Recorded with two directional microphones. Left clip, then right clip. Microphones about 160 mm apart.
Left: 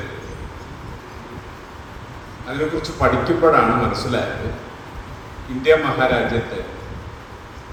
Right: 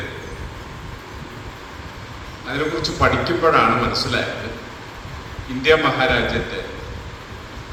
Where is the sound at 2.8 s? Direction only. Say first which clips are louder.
Even; 90° left.